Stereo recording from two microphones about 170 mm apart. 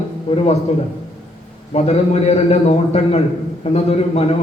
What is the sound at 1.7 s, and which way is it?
A man's voice, 40° left (ahead or behind).